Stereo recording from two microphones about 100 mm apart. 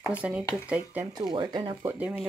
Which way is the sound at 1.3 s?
55° right (ahead or behind).